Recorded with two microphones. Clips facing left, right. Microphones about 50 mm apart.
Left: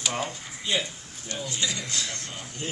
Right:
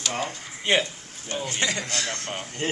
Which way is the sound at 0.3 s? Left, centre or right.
Right.